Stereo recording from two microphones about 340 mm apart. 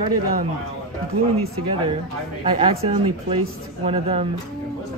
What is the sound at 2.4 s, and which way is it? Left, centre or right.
Speech, centre.